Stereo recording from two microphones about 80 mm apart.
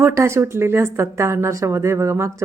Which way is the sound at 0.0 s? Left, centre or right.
Right.